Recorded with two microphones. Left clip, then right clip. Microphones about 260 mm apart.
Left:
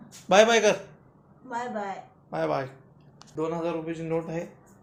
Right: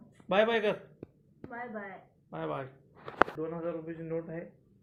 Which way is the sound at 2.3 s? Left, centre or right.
Centre.